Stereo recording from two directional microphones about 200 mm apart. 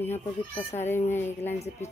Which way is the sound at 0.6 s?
35° left (ahead or behind).